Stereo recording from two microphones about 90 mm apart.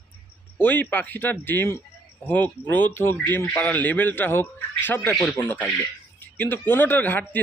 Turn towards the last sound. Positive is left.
turn(degrees=20)  # may be behind; listen again after turning